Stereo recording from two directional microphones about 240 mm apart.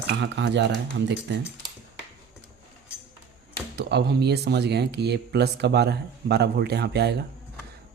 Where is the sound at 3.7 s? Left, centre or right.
Right.